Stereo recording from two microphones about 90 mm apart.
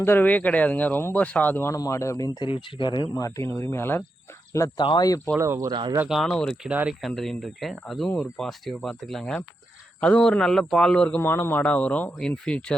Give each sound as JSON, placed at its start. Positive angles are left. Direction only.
{"t": 0.0, "sound": "speech", "side_deg": 25}
{"t": 1.7, "sound": "speech", "side_deg": 35}
{"t": 2.4, "sound": "speech", "side_deg": 70}
{"t": 3.2, "sound": "speech", "side_deg": 40}
{"t": 4.6, "sound": "speech", "side_deg": 40}
{"t": 5.4, "sound": "speech", "side_deg": -35}
{"t": 6.1, "sound": "speech", "side_deg": 0}
{"t": 6.7, "sound": "speech", "side_deg": -15}
{"t": 7.1, "sound": "speech", "side_deg": 5}
{"t": 11.2, "sound": "speech", "side_deg": 25}